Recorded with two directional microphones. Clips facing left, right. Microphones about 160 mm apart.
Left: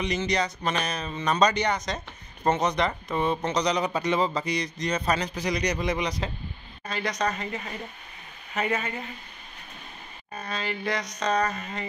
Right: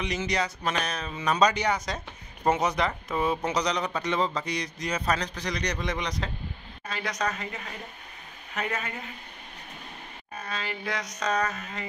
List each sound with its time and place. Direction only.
0.0 s speech: centre (ahead or behind)
10.4 s speech: centre (ahead or behind)